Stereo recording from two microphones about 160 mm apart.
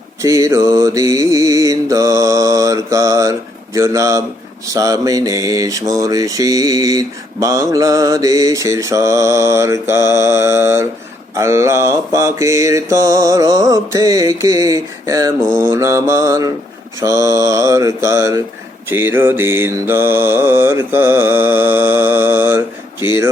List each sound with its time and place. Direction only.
0.2 s mantra: 20° right (ahead or behind)